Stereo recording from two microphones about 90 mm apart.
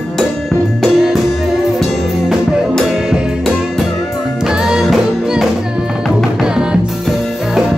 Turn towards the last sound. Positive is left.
turn(degrees=-5)  # may be behind; listen again after turning